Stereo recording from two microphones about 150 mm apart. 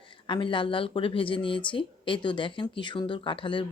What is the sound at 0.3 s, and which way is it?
Speech, 35° left (ahead or behind).